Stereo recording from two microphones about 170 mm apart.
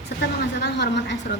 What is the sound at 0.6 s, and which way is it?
Speech, 85° left.